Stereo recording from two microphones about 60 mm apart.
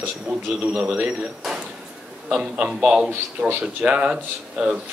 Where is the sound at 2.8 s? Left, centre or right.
Centre.